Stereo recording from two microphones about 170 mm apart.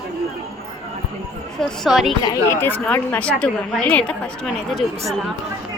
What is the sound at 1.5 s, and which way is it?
Speech, centre (ahead or behind).